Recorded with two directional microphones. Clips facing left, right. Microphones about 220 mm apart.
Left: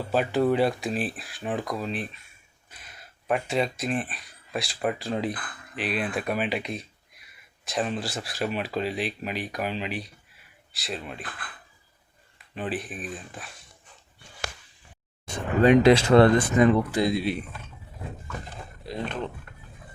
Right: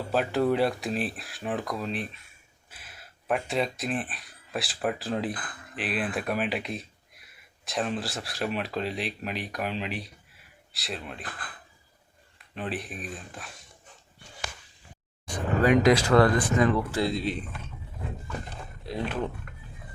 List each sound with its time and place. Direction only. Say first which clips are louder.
0.1 s speech: left 2 dB; centre (ahead or behind)
12.5 s speech: left 2 dB; centre (ahead or behind)
15.3 s speech: left 3 dB; 25° left (ahead or behind)
18.9 s speech: right 1 dB; 5° right (ahead or behind)